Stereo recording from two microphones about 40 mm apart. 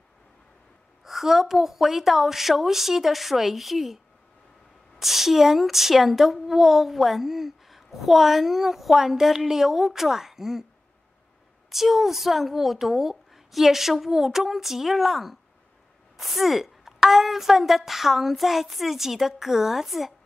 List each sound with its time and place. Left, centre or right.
1.0 s a woman's voice: centre
11.7 s a woman's voice: centre